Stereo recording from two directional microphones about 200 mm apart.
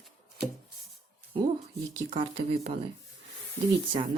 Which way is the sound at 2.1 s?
30° right (ahead or behind).